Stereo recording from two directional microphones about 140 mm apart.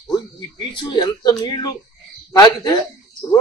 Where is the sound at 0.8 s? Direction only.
35° left (ahead or behind).